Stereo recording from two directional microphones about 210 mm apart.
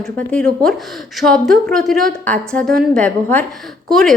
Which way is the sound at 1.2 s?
Centre (ahead or behind).